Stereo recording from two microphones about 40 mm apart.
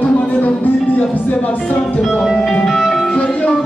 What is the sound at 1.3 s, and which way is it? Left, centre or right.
Music, left.